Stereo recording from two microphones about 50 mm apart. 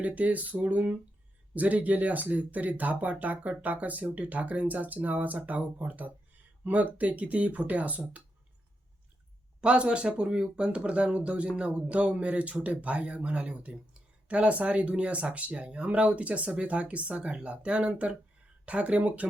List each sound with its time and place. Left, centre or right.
0.0 s speech: right
9.6 s speech: right